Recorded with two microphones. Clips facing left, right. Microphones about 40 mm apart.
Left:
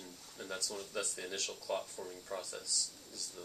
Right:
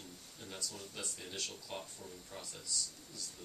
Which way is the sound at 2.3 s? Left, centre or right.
Left.